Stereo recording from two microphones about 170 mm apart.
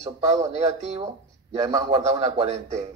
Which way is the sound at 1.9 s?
40° right (ahead or behind).